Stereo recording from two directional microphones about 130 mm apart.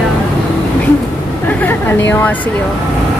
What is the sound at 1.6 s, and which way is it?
Speech, 15° left (ahead or behind).